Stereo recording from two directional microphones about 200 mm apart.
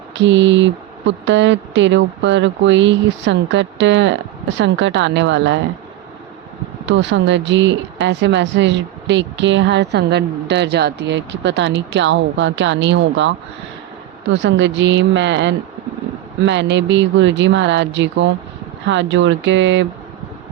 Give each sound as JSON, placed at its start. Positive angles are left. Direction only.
{"t": 0.1, "sound": "speech", "side_deg": -65}
{"t": 6.8, "sound": "speech", "side_deg": -65}
{"t": 14.4, "sound": "speech", "side_deg": -65}